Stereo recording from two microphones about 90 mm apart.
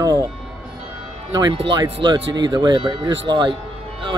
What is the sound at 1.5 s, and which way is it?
Speech, 75° right (ahead or behind).